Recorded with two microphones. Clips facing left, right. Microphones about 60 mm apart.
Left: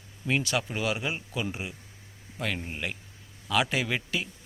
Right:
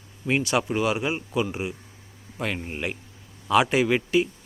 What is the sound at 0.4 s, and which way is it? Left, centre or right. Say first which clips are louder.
Speech: right 6 dB; centre.